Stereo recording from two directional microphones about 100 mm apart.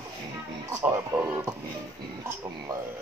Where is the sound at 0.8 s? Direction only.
25° right (ahead or behind).